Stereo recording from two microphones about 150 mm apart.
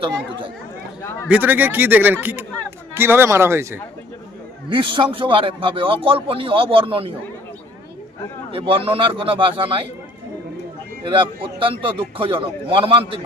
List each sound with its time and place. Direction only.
0.1 s a man's voice: 35° right (ahead or behind)
1.3 s speech: 10° right (ahead or behind)
4.7 s a man's voice: 35° right (ahead or behind)
8.5 s a man's voice: 40° right (ahead or behind)
11.0 s a man's voice: 35° right (ahead or behind)